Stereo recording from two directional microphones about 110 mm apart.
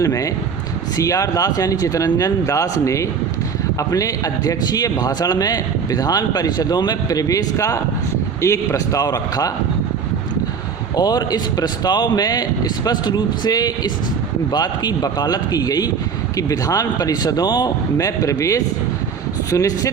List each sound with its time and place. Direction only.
0.0 s a man's voice: 30° left (ahead or behind)
10.9 s a man's voice: 35° left (ahead or behind)